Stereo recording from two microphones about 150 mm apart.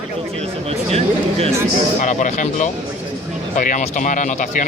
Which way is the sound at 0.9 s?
40° right (ahead or behind).